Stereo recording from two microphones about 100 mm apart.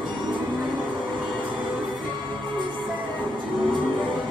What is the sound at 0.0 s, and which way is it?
Music, 50° right (ahead or behind).